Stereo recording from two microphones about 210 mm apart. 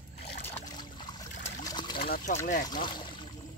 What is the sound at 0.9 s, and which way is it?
Trickle, 20° left (ahead or behind).